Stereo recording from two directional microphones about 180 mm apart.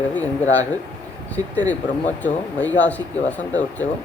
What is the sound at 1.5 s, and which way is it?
Speech, 10° left (ahead or behind).